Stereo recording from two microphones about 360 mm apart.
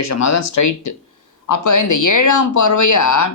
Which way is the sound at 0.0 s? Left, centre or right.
Left.